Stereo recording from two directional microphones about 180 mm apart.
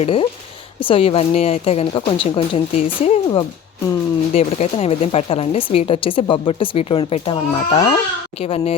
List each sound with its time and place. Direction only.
0.0 s a woman's voice: 30° left (ahead or behind)